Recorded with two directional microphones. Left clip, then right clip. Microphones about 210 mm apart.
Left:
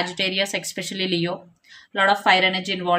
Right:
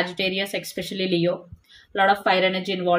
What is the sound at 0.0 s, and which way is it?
Speech, 25° left (ahead or behind).